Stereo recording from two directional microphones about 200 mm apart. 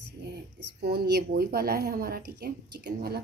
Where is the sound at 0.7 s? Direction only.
55° right (ahead or behind).